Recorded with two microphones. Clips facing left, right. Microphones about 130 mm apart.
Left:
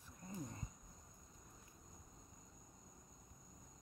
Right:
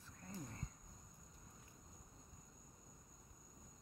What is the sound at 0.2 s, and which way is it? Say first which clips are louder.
Cricket: left 2 dB; 20° left (ahead or behind).